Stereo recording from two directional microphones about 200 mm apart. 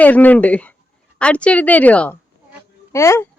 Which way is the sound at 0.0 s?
10° left (ahead or behind).